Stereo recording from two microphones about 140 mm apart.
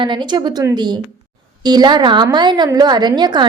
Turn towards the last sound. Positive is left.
turn(degrees=-30)  # may be behind; listen again after turning